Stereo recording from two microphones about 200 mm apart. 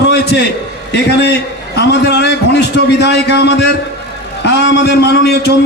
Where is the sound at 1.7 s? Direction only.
55° left (ahead or behind).